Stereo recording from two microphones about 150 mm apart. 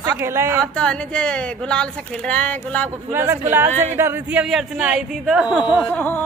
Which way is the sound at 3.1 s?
15° right (ahead or behind).